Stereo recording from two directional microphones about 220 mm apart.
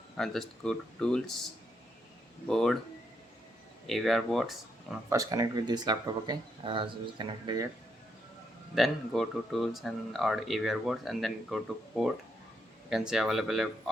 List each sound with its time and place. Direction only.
0.2 s speech: 5° left (ahead or behind)
2.5 s speech: centre (ahead or behind)
3.8 s speech: centre (ahead or behind)
5.0 s speech: 15° right (ahead or behind)
8.7 s speech: centre (ahead or behind)